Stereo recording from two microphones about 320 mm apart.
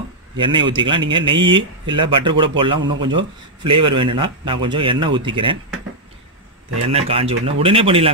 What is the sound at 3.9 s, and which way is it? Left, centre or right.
Speech, centre.